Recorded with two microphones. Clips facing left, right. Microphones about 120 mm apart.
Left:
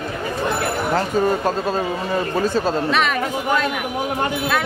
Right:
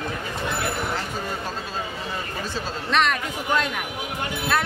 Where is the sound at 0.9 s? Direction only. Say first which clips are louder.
Left 11 dB; 60° left (ahead or behind).